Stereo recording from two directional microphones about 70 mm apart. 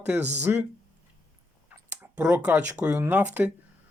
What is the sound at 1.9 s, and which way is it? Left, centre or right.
Speech, right.